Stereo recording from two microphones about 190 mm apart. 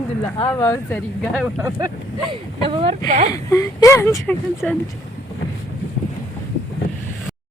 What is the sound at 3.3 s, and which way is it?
Speech, 15° left (ahead or behind).